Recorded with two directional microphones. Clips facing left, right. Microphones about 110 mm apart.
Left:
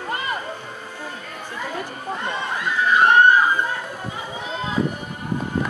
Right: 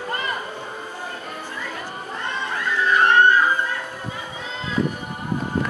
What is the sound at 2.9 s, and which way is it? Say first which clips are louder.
Music: left 2 dB; 15° left (ahead or behind).